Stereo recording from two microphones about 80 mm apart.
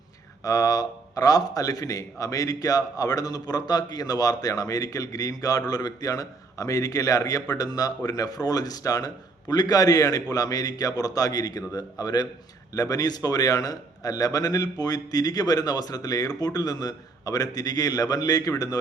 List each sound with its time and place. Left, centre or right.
0.4 s a man's voice: left